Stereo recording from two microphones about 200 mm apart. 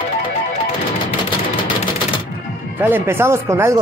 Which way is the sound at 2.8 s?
10° right (ahead or behind).